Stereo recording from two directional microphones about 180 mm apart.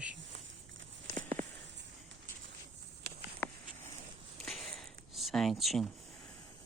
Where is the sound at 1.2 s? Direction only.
45° right (ahead or behind).